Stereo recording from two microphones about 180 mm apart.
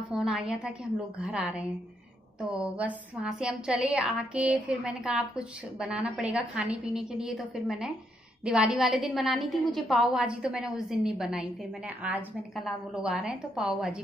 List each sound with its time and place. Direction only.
0.1 s a woman's voice: centre (ahead or behind)